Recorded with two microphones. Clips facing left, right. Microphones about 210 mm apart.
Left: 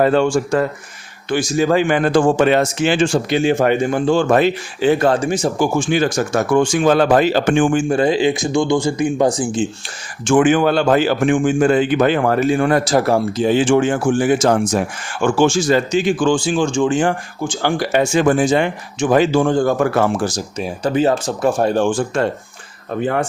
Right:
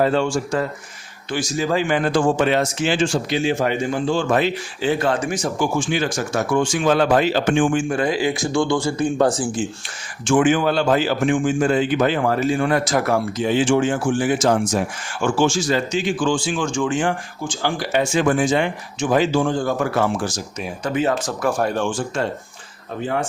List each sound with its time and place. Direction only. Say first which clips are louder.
0.0 s a man's voice: left 4 dB; 55° left (ahead or behind)
5.2 s speech: left 5 dB; 25° left (ahead or behind)
5.5 s a man's voice: left 3 dB; 45° left (ahead or behind)
7.9 s speech: left 5 dB; 25° left (ahead or behind)
10.2 s speech: left 3 dB; 55° left (ahead or behind)
12.8 s speech: left 4 dB; 30° left (ahead or behind)
13.6 s a man's voice: left 1 dB; 55° left (ahead or behind)
16.6 s speech: left 5 dB; 25° left (ahead or behind)
17.6 s speech: left 4 dB; 50° left (ahead or behind); by 21.8 s 30° left (ahead or behind)
21.8 s a man's voice: left 5 dB; 55° left (ahead or behind)